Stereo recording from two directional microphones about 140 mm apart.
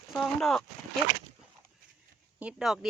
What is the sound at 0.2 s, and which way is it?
Speech, 5° left (ahead or behind).